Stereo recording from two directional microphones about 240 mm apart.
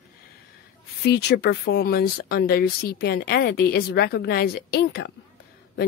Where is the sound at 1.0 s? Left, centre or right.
Left.